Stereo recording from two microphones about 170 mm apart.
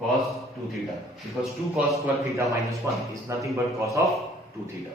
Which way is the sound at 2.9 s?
15° right (ahead or behind).